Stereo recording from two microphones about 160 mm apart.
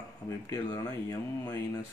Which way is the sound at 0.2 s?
15° left (ahead or behind).